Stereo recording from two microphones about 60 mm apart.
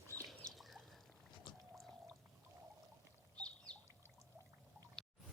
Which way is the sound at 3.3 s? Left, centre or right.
Centre.